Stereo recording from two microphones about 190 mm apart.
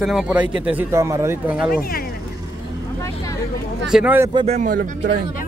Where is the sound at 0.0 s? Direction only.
5° right (ahead or behind).